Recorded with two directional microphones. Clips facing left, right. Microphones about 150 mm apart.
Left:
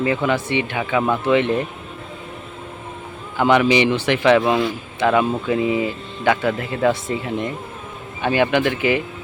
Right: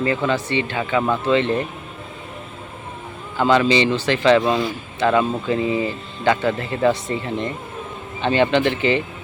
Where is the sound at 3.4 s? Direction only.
15° left (ahead or behind).